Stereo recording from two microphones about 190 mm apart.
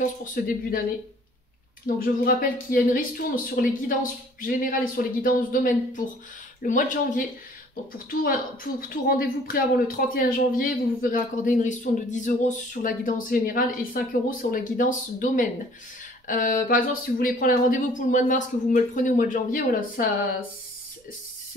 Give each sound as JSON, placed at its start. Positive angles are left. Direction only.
{"t": 0.0, "sound": "a man's voice", "side_deg": 45}
{"t": 2.0, "sound": "a man's voice", "side_deg": 50}